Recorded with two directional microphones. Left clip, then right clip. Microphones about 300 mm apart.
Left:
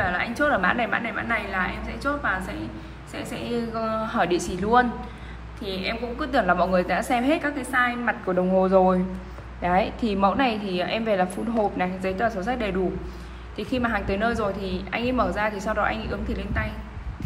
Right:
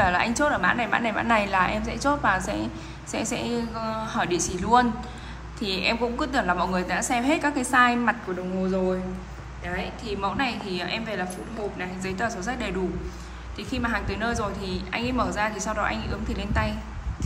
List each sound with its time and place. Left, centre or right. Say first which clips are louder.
0.0 s a woman's voice: right 2 dB; centre
9.7 s a woman's voice: left 8 dB; centre